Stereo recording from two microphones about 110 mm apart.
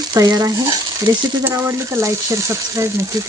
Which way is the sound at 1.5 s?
25° right (ahead or behind).